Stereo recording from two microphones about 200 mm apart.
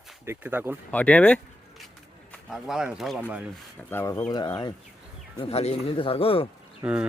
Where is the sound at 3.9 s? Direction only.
15° left (ahead or behind).